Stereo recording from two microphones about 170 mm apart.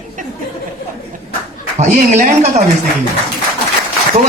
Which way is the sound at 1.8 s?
45° right (ahead or behind).